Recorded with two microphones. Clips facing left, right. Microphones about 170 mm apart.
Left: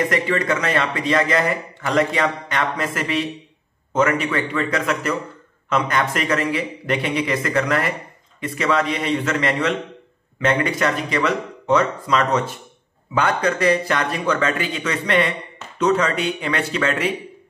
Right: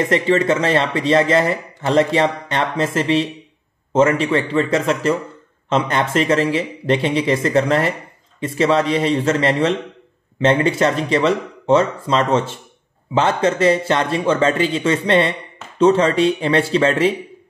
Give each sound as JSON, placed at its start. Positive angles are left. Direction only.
{"t": 0.0, "sound": "a man's voice", "side_deg": -25}